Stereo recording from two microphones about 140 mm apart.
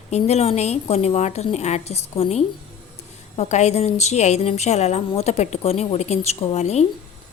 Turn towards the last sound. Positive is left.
turn(degrees=50)  # may be behind; listen again after turning